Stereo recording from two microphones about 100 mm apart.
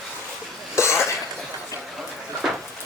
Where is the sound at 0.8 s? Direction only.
30° left (ahead or behind).